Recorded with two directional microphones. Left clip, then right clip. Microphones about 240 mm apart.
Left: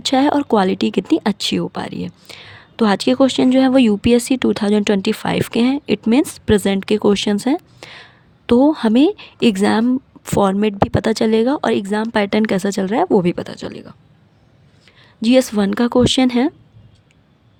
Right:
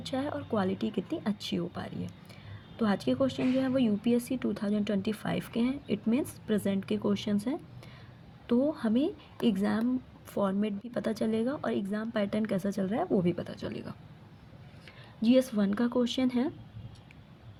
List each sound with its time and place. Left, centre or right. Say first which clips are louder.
0.0 s a woman's voice: left 19 dB; left
15.2 s speech: left 12 dB; left